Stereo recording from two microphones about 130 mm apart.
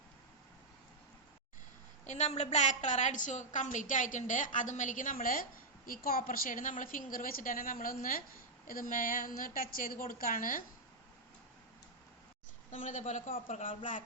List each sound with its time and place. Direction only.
2.0 s a woman's voice: 60° left (ahead or behind); by 10.6 s 90° left
12.7 s a man's voice: 75° left (ahead or behind)